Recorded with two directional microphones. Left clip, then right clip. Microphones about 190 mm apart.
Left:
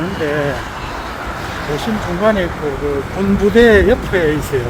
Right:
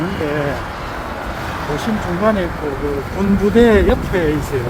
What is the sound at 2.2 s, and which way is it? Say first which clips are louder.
Speech: left 2 dB; 30° left (ahead or behind).